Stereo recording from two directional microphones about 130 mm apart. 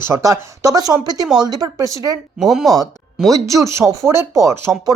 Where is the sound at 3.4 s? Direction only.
25° right (ahead or behind).